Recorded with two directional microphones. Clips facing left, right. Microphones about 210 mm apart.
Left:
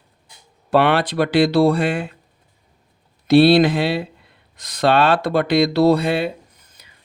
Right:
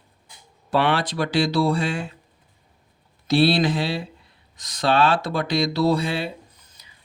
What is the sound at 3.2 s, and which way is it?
Speech, 60° left (ahead or behind).